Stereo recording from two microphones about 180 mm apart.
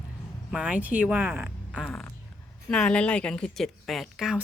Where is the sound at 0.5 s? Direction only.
5° right (ahead or behind).